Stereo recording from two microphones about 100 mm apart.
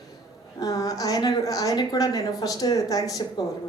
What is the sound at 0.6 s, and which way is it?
A woman's voice, 40° left (ahead or behind).